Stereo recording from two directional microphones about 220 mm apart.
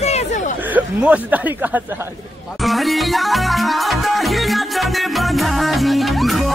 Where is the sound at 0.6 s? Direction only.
5° right (ahead or behind).